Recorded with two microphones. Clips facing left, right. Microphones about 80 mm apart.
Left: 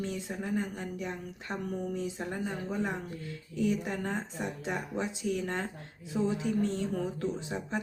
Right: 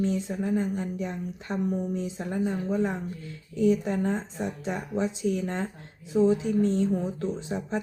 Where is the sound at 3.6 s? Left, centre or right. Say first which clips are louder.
Right 7 dB; right.